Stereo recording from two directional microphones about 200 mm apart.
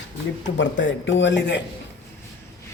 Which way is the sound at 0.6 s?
65° left (ahead or behind).